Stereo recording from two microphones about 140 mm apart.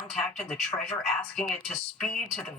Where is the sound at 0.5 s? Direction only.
10° left (ahead or behind).